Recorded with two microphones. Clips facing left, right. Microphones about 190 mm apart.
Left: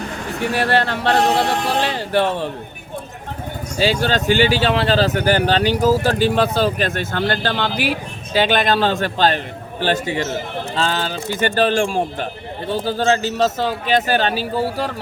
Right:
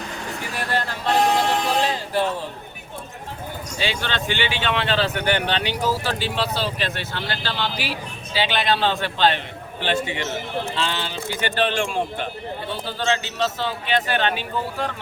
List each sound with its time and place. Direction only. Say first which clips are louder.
0.4 s speech: left 9 dB; 70° left (ahead or behind)
3.8 s a man's voice: left 9 dB; 40° left (ahead or behind)